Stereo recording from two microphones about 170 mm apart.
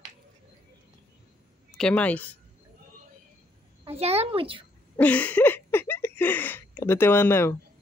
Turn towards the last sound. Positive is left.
turn(degrees=15)  # may be behind; listen again after turning